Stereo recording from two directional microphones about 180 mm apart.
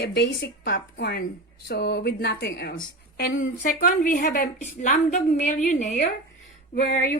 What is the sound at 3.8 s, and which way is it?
A woman's voice, 50° left (ahead or behind).